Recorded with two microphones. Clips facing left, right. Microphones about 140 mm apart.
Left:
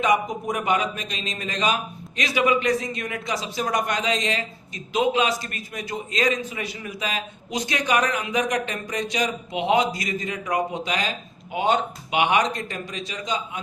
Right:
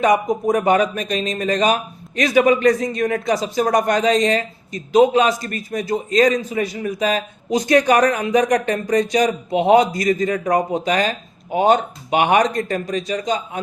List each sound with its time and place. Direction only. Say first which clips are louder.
0.0 s a man's voice: right 6 dB; 45° right (ahead or behind)